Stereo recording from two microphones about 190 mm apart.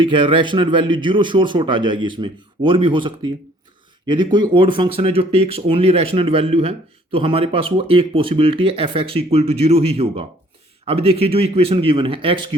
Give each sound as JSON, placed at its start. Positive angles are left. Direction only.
{"t": 0.0, "sound": "speech", "side_deg": -25}